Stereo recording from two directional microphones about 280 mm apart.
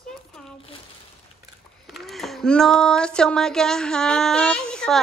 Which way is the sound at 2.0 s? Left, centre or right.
Centre.